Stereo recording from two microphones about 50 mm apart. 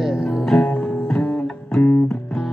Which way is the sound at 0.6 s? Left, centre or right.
Centre.